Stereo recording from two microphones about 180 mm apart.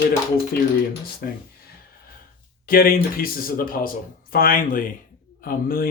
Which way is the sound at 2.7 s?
55° left (ahead or behind).